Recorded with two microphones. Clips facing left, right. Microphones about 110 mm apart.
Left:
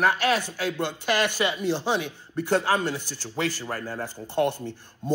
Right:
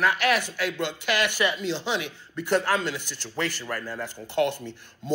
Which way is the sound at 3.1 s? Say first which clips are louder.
Left 2 dB; 15° left (ahead or behind).